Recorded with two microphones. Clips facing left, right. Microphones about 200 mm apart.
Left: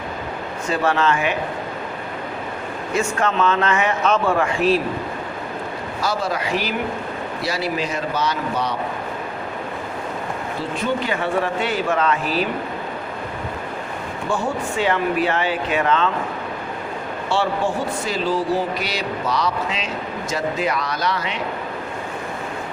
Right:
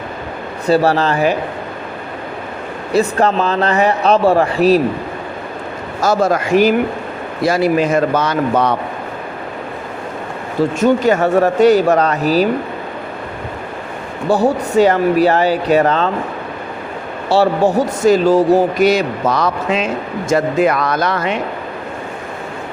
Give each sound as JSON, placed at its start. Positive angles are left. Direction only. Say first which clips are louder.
{"t": 0.7, "sound": "speech", "louder": "right 6 dB", "side_deg": -35}
{"t": 2.9, "sound": "speech", "louder": "right 7 dB", "side_deg": -35}
{"t": 6.0, "sound": "speech", "louder": "right 9 dB", "side_deg": -45}
{"t": 10.8, "sound": "speech", "louder": "right 10 dB", "side_deg": -45}
{"t": 14.3, "sound": "speech", "louder": "right 9 dB", "side_deg": -40}
{"t": 17.2, "sound": "speech", "louder": "right 9 dB", "side_deg": -40}